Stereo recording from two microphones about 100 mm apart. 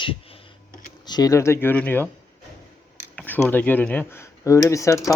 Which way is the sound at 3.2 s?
20° left (ahead or behind).